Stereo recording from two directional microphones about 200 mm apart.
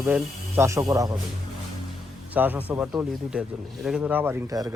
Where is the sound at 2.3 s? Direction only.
10° right (ahead or behind).